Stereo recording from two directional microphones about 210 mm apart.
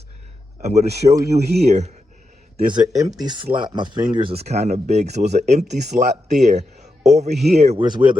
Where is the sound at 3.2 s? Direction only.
20° right (ahead or behind).